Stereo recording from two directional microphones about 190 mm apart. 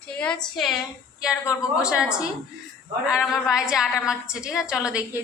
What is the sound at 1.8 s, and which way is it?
A woman's voice, 5° right (ahead or behind).